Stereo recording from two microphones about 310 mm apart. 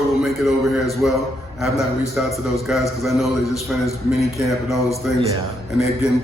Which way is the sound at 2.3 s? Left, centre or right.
Centre.